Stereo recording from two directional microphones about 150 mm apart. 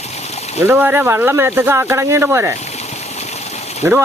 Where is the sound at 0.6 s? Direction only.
10° right (ahead or behind).